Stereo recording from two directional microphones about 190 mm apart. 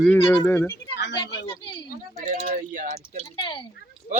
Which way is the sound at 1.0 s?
65° left (ahead or behind).